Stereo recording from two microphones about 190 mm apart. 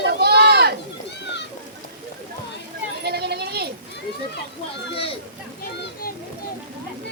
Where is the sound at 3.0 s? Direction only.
60° right (ahead or behind).